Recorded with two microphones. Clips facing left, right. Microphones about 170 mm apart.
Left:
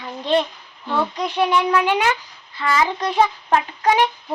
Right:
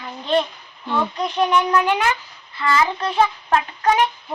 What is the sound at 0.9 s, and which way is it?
Speech, 10° left (ahead or behind).